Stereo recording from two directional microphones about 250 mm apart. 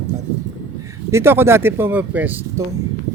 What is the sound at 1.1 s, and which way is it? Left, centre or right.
Speech, centre.